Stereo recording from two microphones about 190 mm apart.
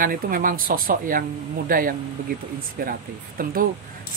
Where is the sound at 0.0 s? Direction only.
50° right (ahead or behind).